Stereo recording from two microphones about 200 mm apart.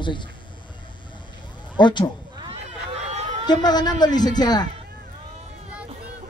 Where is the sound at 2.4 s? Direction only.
30° right (ahead or behind).